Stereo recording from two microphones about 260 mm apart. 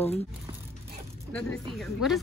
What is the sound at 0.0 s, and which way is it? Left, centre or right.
Speech, left.